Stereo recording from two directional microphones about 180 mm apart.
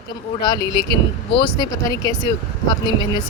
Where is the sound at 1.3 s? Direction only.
25° left (ahead or behind).